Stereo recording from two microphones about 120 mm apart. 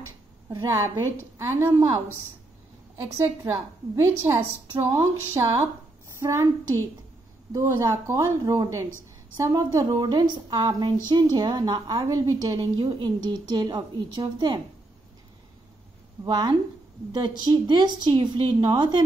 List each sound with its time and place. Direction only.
0.5 s a woman's voice: 30° right (ahead or behind)
3.4 s a woman's voice: 20° right (ahead or behind)
7.5 s a woman's voice: 25° right (ahead or behind)
16.3 s a woman's voice: 35° right (ahead or behind)